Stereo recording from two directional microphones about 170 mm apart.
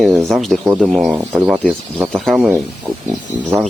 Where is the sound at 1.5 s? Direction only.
5° left (ahead or behind).